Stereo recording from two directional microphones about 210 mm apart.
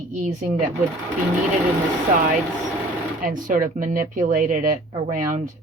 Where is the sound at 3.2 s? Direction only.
40° right (ahead or behind).